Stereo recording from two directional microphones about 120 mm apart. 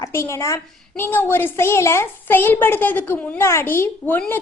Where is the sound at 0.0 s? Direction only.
25° left (ahead or behind).